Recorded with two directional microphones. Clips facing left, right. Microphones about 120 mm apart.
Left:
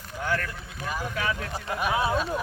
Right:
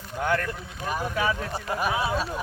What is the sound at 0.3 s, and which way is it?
Speech, 20° right (ahead or behind).